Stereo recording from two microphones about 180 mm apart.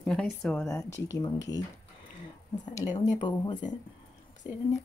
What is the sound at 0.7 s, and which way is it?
Speech, 15° left (ahead or behind).